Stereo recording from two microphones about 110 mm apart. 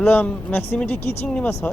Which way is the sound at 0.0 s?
15° left (ahead or behind).